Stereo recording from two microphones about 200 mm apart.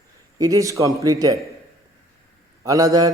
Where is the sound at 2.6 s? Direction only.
15° right (ahead or behind).